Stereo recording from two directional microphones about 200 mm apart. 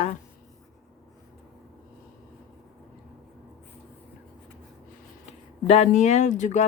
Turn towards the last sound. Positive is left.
turn(degrees=35)  # may be behind; listen again after turning